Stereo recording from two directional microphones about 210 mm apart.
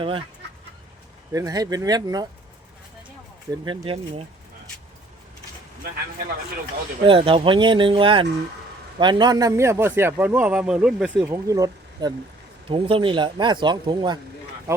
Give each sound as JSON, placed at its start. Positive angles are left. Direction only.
{"t": 0.0, "sound": "speech", "side_deg": -25}
{"t": 1.3, "sound": "a man's voice", "side_deg": -15}
{"t": 3.5, "sound": "speech", "side_deg": -15}
{"t": 7.0, "sound": "a man's voice", "side_deg": -25}